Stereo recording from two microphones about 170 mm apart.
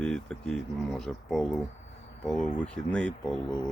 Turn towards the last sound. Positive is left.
turn(degrees=5)  # may be behind; listen again after turning